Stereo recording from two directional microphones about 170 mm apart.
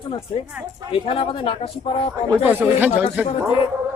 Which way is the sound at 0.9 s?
30° left (ahead or behind).